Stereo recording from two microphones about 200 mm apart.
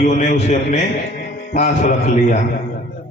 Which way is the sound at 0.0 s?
40° left (ahead or behind).